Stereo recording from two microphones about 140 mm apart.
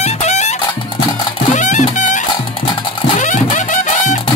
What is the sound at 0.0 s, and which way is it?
Music, 55° left (ahead or behind).